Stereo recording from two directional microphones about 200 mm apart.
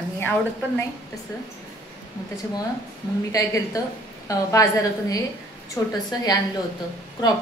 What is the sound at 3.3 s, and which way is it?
A woman's voice, 15° left (ahead or behind).